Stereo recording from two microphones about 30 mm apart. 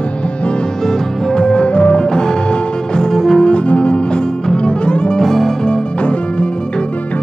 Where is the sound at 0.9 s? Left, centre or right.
Left.